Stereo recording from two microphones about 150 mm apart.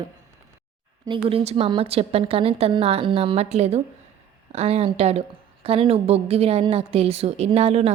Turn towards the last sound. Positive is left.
turn(degrees=-45)  # may be behind; listen again after turning